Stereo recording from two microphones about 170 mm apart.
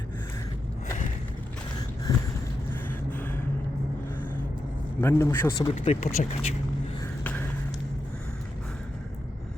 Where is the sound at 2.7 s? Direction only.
10° left (ahead or behind).